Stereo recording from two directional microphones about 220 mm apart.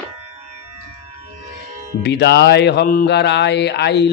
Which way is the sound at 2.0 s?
50° left (ahead or behind).